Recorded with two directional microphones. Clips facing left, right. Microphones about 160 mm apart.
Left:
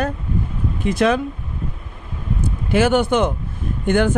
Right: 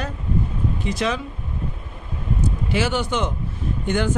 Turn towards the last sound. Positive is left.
turn(degrees=55)  # may be behind; listen again after turning